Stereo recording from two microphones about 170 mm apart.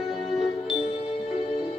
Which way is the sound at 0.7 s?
35° left (ahead or behind).